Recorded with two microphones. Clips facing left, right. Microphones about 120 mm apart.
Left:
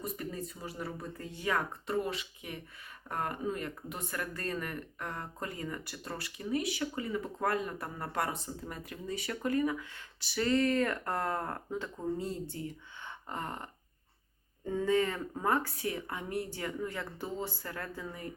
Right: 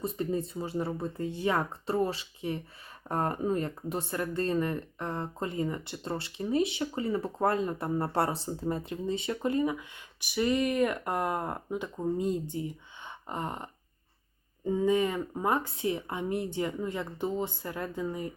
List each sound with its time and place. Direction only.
0.0 s speech: 25° right (ahead or behind)